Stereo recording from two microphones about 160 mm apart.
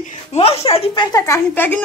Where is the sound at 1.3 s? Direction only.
10° left (ahead or behind).